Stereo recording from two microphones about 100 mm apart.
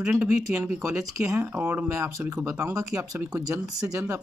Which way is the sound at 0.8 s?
30° right (ahead or behind).